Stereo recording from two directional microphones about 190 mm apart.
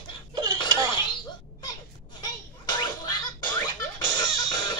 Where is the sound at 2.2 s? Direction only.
20° left (ahead or behind).